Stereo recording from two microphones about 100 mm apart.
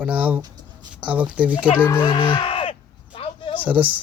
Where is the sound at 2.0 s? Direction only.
60° left (ahead or behind).